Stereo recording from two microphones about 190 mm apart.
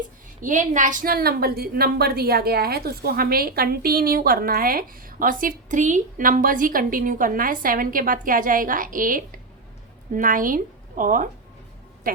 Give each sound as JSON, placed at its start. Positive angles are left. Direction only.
{"t": 0.4, "sound": "a woman's voice", "side_deg": -40}